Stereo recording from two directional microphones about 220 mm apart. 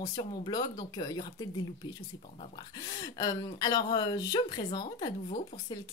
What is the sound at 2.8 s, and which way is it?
Speech, 20° left (ahead or behind).